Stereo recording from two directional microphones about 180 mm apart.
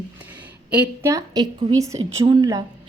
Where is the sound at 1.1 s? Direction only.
20° right (ahead or behind).